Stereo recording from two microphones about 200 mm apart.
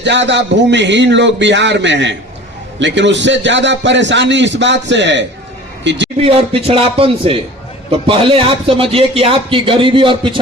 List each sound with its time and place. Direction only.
0.0 s a man's voice: 60° right (ahead or behind)
6.2 s a man's voice: 30° right (ahead or behind)